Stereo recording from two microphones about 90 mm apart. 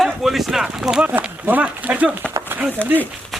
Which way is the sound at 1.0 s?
20° right (ahead or behind).